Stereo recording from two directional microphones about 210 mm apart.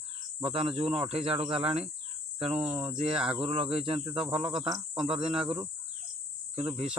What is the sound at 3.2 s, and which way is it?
Cricket, 5° right (ahead or behind).